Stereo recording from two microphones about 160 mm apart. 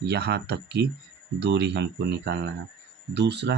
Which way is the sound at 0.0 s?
90° right.